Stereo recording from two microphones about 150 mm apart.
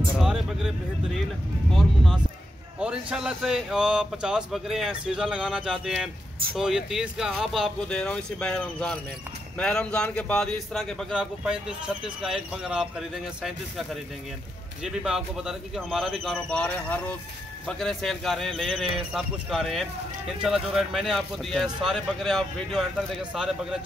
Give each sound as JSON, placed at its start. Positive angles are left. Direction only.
{"t": 0.2, "sound": "vehicle", "side_deg": -5}
{"t": 1.7, "sound": "a man's voice", "side_deg": 0}